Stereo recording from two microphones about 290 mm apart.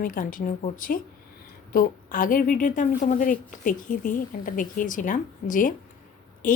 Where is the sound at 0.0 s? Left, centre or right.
Left.